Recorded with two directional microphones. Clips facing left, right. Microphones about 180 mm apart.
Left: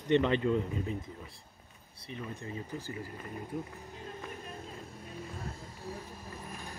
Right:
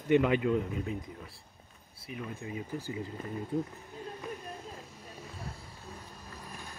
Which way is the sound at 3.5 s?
25° right (ahead or behind).